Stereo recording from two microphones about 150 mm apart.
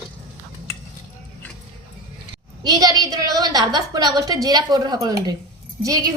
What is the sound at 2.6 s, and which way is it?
A woman's voice, 25° right (ahead or behind).